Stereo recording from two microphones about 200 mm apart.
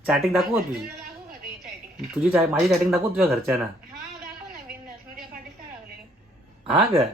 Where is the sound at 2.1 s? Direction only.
5° right (ahead or behind).